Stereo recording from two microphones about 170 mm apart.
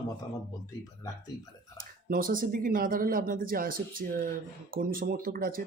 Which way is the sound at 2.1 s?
55° right (ahead or behind).